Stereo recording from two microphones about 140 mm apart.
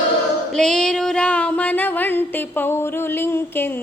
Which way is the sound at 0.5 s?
5° left (ahead or behind).